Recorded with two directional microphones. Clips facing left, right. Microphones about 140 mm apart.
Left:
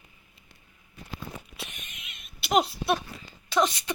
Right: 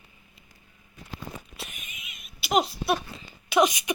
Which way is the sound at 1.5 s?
5° right (ahead or behind).